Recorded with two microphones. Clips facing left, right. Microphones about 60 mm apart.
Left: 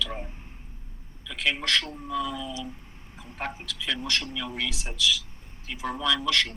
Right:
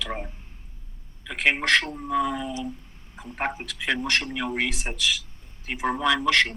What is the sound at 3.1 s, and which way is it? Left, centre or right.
A man's voice, right.